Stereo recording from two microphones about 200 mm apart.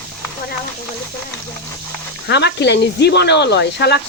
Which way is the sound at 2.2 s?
55° left (ahead or behind).